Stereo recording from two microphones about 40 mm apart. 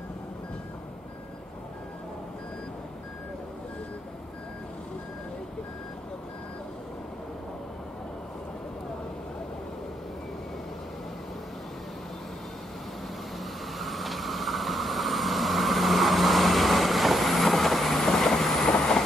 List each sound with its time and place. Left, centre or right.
13.7 s vehicle: centre
18.7 s train: centre